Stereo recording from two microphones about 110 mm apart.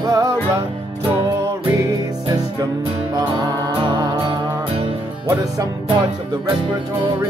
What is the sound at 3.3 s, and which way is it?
Music, 40° right (ahead or behind).